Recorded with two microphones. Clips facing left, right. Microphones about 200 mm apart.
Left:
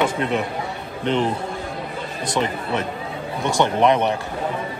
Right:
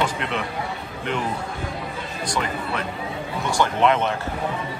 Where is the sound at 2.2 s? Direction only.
20° left (ahead or behind).